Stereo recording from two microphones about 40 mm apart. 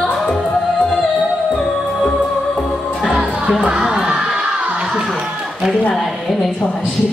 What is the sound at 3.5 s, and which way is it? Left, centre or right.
Speech, centre.